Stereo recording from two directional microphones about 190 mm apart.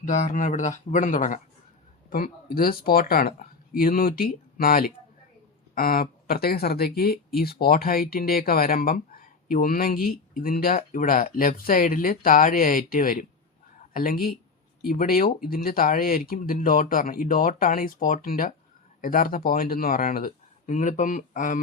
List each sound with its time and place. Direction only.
0.0 s speech: 40° left (ahead or behind)